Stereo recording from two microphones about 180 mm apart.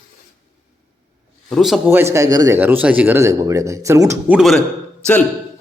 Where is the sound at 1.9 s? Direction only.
15° right (ahead or behind).